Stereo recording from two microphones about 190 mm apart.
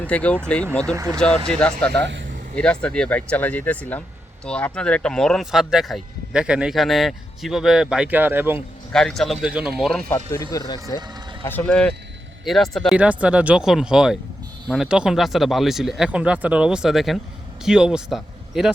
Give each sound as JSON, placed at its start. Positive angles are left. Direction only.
{"t": 0.0, "sound": "speech", "side_deg": 5}
{"t": 0.9, "sound": "speech", "side_deg": -15}
{"t": 1.5, "sound": "speech", "side_deg": 5}
{"t": 8.9, "sound": "speech", "side_deg": 0}
{"t": 10.1, "sound": "speech", "side_deg": 15}